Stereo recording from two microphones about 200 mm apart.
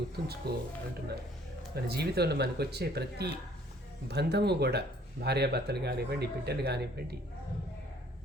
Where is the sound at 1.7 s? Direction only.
55° right (ahead or behind).